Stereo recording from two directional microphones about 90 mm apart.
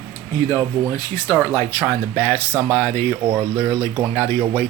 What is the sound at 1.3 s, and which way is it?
Speech, 30° left (ahead or behind).